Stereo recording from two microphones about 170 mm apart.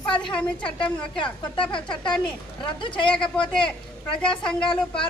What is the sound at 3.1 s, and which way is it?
Speech, 5° left (ahead or behind).